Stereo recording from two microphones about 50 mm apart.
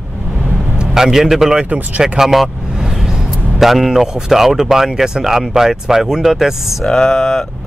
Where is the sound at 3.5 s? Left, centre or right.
Centre.